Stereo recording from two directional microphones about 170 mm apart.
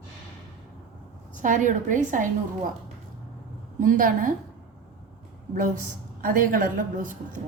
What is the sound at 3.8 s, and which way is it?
Speech, 50° right (ahead or behind).